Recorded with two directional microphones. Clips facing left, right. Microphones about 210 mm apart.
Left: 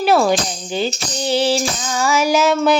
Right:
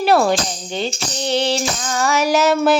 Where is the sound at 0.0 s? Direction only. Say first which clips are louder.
Even; centre (ahead or behind).